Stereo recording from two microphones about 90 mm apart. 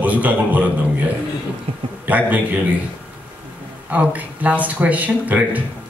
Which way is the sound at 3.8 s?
15° right (ahead or behind).